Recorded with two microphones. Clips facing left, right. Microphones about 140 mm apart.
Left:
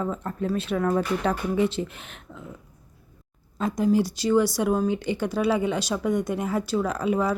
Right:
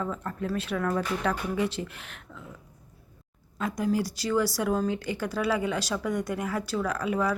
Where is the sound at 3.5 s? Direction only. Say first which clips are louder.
Left 5 dB; 30° left (ahead or behind).